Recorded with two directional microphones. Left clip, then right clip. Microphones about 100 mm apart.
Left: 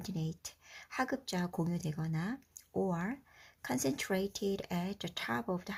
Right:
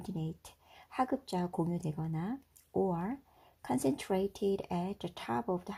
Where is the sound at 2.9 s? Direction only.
5° right (ahead or behind).